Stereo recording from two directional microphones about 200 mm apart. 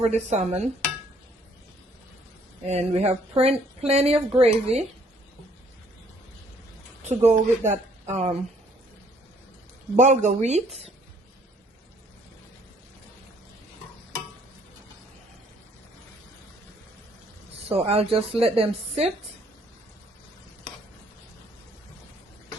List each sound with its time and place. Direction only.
0.0 s speech: 35° right (ahead or behind)
2.6 s speech: 35° right (ahead or behind)
7.1 s speech: 35° right (ahead or behind)
9.9 s speech: 35° right (ahead or behind)
17.7 s a woman's voice: 30° right (ahead or behind)